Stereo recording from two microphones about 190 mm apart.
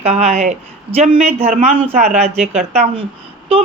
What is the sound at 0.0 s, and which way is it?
A woman's voice, 35° right (ahead or behind).